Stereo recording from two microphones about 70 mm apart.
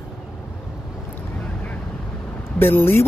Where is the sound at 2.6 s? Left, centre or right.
Left.